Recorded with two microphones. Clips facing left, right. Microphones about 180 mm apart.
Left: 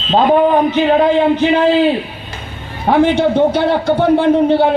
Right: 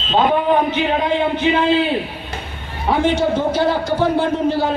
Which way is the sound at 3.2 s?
60° left (ahead or behind).